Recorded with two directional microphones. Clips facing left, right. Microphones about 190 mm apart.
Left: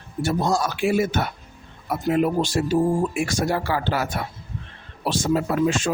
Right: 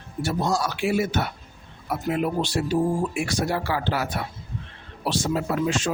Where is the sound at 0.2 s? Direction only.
50° left (ahead or behind).